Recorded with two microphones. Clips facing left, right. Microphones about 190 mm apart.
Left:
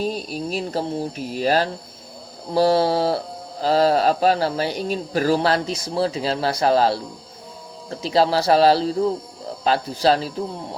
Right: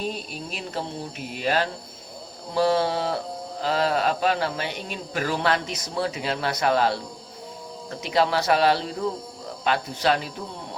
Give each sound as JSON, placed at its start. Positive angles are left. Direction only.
{"t": 0.0, "sound": "speech", "side_deg": 40}